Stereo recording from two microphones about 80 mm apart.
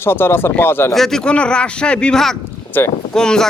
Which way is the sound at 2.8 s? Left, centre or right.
Left.